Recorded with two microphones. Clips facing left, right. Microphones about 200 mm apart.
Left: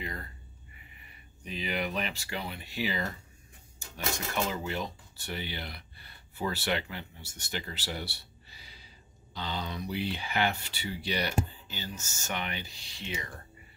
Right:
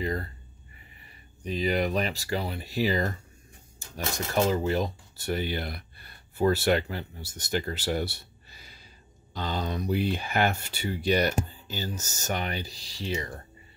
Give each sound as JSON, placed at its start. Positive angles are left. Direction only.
{"t": 0.0, "sound": "a sound", "side_deg": -40}
{"t": 1.0, "sound": "speech", "side_deg": -40}
{"t": 3.9, "sound": "cutlery", "side_deg": -40}
{"t": 9.3, "sound": "speech", "side_deg": -45}